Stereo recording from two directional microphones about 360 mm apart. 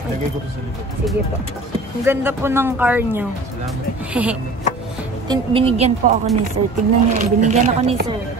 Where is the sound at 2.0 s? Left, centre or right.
Centre.